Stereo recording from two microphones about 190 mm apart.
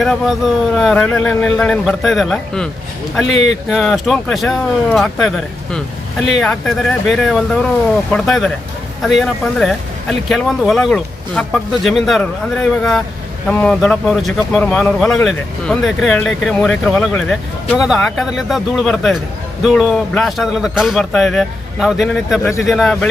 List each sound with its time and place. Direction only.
0.0 s speech: centre (ahead or behind)
6.3 s speech: centre (ahead or behind)
22.4 s speech: 15° left (ahead or behind)
22.7 s speech: centre (ahead or behind)